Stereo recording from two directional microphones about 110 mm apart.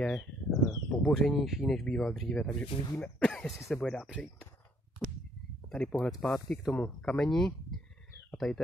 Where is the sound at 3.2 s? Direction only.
10° left (ahead or behind).